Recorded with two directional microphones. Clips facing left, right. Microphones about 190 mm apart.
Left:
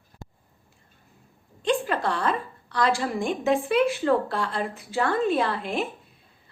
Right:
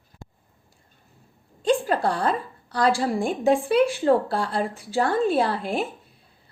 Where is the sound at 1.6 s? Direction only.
35° right (ahead or behind).